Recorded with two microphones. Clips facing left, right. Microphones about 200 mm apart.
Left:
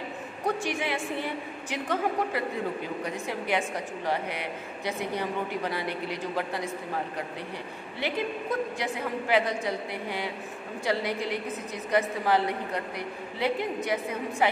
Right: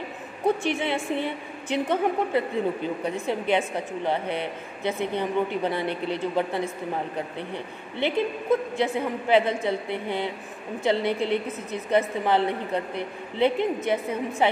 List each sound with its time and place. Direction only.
0.7 s a woman's voice: 25° right (ahead or behind)
8.0 s a woman's voice: 25° right (ahead or behind)